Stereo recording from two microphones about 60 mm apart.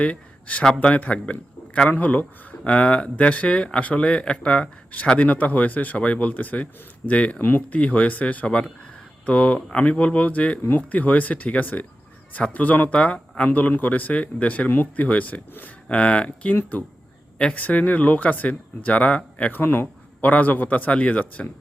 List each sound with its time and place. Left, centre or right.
0.0 s a man's voice: left